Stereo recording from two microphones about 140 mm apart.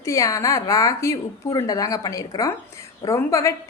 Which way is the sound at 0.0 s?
20° left (ahead or behind).